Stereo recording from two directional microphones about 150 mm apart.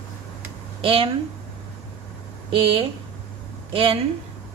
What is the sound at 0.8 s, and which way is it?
Speech, 40° right (ahead or behind).